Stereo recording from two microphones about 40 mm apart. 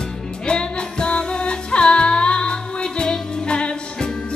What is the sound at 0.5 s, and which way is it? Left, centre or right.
Music, left.